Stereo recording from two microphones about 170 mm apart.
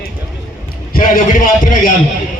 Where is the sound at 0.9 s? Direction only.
50° left (ahead or behind).